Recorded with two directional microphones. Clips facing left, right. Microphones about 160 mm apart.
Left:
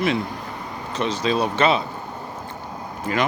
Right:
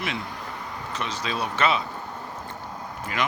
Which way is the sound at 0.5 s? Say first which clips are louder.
Left 5 dB; 20° left (ahead or behind).